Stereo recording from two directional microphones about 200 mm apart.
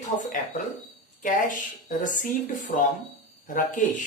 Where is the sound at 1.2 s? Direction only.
40° left (ahead or behind).